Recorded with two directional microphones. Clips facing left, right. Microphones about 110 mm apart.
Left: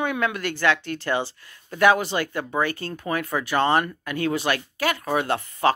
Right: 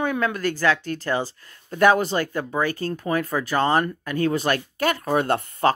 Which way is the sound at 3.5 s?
10° right (ahead or behind).